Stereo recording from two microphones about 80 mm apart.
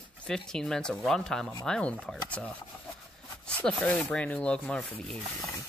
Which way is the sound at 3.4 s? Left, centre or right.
Centre.